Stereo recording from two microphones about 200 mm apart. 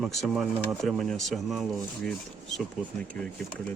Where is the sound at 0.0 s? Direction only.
Centre (ahead or behind).